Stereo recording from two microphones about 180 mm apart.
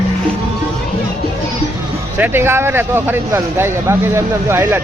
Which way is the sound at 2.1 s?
10° right (ahead or behind).